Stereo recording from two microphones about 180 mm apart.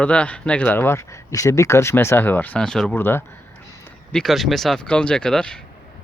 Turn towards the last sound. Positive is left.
turn(degrees=5)  # may be behind; listen again after turning